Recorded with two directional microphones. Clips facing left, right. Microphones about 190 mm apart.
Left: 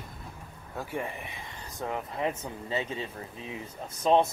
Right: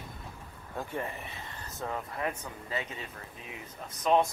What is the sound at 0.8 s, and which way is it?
Speech, 10° left (ahead or behind).